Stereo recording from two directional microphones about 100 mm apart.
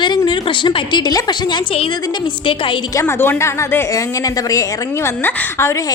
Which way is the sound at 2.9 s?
25° left (ahead or behind).